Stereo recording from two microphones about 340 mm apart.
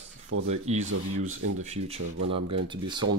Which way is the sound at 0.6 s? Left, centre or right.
Centre.